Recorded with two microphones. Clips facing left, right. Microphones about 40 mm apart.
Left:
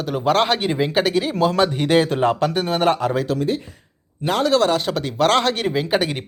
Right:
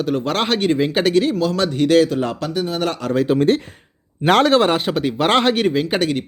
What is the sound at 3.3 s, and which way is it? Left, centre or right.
Speech, right.